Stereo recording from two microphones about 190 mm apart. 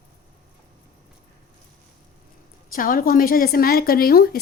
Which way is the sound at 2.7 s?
50° left (ahead or behind).